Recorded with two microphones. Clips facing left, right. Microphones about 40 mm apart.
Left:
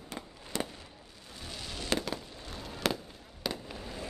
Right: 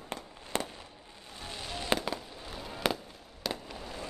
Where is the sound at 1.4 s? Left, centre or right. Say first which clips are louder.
Right 2 dB; centre.